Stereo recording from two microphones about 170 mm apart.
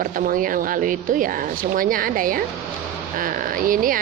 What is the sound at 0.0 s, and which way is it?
A woman's voice, 55° right (ahead or behind).